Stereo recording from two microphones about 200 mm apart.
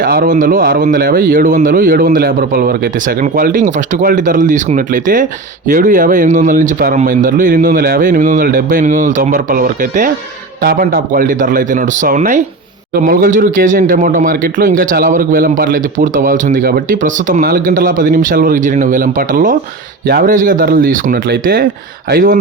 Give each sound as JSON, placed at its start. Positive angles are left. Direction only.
{"t": 0.0, "sound": "speech", "side_deg": -45}